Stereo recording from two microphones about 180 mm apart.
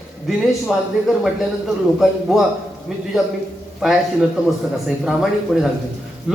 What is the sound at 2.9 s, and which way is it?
Speech, centre (ahead or behind).